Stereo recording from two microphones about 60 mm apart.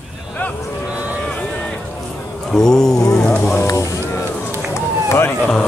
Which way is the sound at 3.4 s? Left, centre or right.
Left.